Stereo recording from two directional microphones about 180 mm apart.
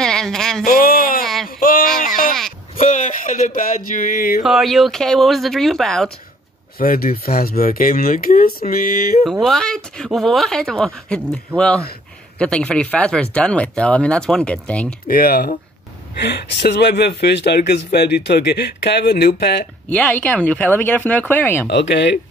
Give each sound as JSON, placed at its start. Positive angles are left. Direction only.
{"t": 0.0, "sound": "a sound", "side_deg": 5}
{"t": 0.7, "sound": "a sound", "side_deg": 55}
{"t": 1.2, "sound": "a sound", "side_deg": 0}
{"t": 1.6, "sound": "music", "side_deg": 50}
{"t": 2.0, "sound": "sheep", "side_deg": 50}
{"t": 2.8, "sound": "speech", "side_deg": 45}
{"t": 4.4, "sound": "speech", "side_deg": 0}
{"t": 6.8, "sound": "speech", "side_deg": 55}
{"t": 9.2, "sound": "speech", "side_deg": 0}
{"t": 15.0, "sound": "speech", "side_deg": 55}
{"t": 16.2, "sound": "speech", "side_deg": 70}
{"t": 19.9, "sound": "speech", "side_deg": 5}
{"t": 21.6, "sound": "speech", "side_deg": 75}